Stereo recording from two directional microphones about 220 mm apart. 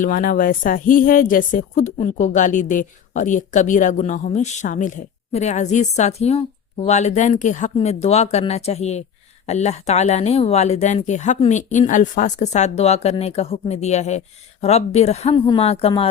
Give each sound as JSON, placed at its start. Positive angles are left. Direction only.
{"t": 0.0, "sound": "a woman's voice", "side_deg": 35}